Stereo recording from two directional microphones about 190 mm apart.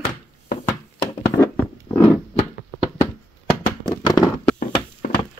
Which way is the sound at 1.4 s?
15° left (ahead or behind).